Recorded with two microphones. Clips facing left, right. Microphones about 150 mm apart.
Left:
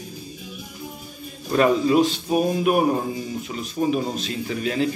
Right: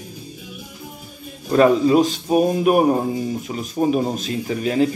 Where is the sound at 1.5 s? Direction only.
35° right (ahead or behind).